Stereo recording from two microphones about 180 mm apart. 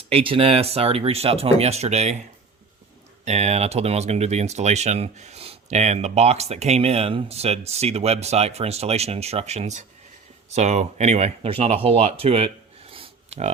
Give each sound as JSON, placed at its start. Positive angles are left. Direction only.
{"t": 0.1, "sound": "speech", "side_deg": -30}
{"t": 3.2, "sound": "speech", "side_deg": -40}
{"t": 12.9, "sound": "a sound", "side_deg": -35}